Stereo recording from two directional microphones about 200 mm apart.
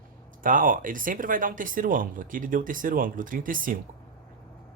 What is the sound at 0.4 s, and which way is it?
Speech, 45° right (ahead or behind).